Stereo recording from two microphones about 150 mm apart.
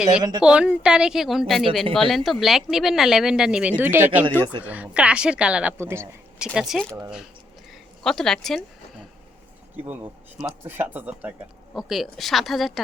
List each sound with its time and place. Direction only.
0.1 s a woman's voice: 30° right (ahead or behind)
0.4 s speech: 5° right (ahead or behind)
6.5 s speech: centre (ahead or behind)
8.0 s speech: 5° left (ahead or behind)
9.7 s speech: 15° right (ahead or behind)